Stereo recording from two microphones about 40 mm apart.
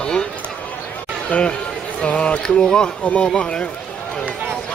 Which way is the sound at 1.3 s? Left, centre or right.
Left.